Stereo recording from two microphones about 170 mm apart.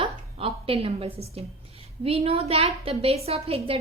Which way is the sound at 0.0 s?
35° right (ahead or behind).